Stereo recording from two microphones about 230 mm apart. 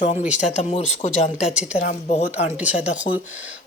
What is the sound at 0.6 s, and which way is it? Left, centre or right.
Speech, left.